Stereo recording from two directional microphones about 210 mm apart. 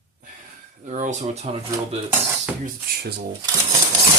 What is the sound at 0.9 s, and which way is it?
Speech, 35° right (ahead or behind).